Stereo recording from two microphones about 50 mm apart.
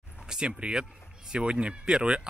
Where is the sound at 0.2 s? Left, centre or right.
Centre.